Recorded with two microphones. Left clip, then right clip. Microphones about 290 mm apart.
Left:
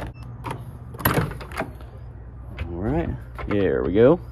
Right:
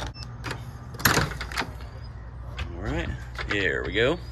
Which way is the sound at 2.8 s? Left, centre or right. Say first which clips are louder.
Left 6 dB; centre.